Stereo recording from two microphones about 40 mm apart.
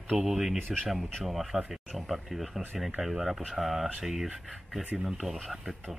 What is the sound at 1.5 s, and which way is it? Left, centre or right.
Speech, right.